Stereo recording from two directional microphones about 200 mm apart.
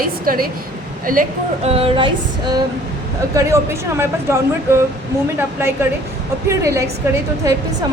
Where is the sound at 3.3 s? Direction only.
15° right (ahead or behind).